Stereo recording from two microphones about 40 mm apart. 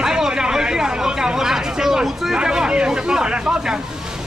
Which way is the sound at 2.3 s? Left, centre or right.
Centre.